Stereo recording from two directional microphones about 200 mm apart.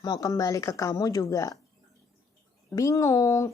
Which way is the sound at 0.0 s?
15° left (ahead or behind).